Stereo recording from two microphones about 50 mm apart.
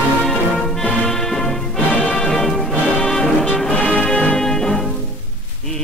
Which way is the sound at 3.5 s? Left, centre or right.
Centre.